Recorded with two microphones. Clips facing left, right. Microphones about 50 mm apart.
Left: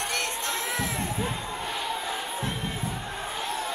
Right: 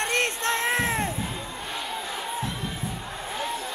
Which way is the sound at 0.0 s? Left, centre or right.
Right.